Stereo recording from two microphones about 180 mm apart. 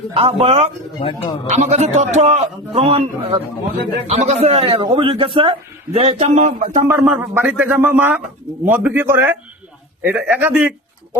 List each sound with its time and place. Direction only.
0.1 s a man's voice: 30° right (ahead or behind)
0.9 s speech: 25° left (ahead or behind)
1.5 s a man's voice: 40° right (ahead or behind)
6.8 s speech: 15° right (ahead or behind)